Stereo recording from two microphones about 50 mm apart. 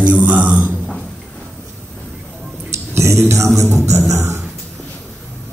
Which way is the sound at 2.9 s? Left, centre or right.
Right.